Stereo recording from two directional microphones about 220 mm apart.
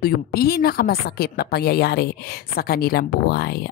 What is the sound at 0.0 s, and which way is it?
Speech, 45° left (ahead or behind).